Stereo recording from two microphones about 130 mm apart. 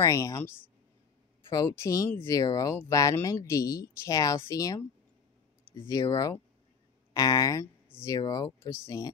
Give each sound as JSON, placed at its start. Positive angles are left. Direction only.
{"t": 0.0, "sound": "speech", "side_deg": 25}
{"t": 1.5, "sound": "speech", "side_deg": 25}
{"t": 5.9, "sound": "speech", "side_deg": 25}
{"t": 8.5, "sound": "speech", "side_deg": 20}